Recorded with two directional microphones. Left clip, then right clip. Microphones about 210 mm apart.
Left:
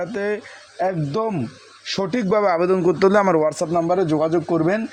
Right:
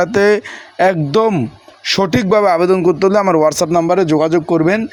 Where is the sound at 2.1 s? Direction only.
15° right (ahead or behind).